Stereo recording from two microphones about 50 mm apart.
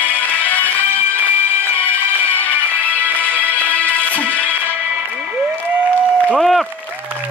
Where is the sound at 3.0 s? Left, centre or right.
Left.